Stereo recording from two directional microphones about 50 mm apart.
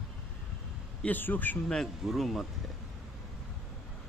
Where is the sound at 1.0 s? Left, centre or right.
Left.